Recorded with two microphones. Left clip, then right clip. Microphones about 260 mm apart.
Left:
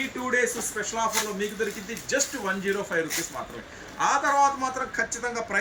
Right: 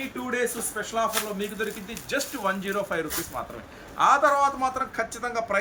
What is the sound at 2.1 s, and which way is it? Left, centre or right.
Speech, centre.